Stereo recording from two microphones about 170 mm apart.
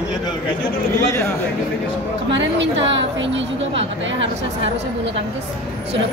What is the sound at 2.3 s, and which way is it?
A woman's voice, 90° right.